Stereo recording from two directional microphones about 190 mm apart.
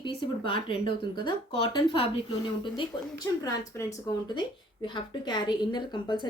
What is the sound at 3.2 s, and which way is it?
A woman's voice, 15° left (ahead or behind).